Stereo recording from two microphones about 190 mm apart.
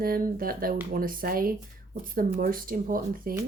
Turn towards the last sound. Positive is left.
turn(degrees=-45)  # may be behind; listen again after turning